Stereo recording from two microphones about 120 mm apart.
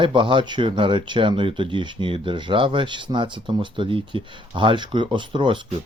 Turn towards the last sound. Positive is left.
turn(degrees=-40)  # may be behind; listen again after turning